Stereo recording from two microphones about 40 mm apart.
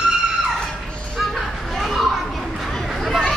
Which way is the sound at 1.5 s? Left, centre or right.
Centre.